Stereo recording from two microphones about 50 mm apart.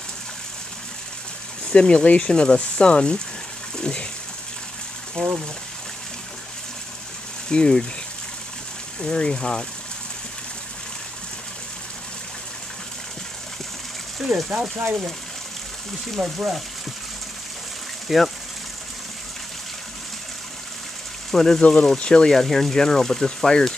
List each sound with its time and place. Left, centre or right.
1.7 s speech: centre
3.7 s a sound: centre
5.2 s speech: centre
7.4 s speech: centre
9.0 s speech: centre
16.2 s speech: centre
18.0 s speech: centre
21.3 s speech: centre
21.5 s speech: left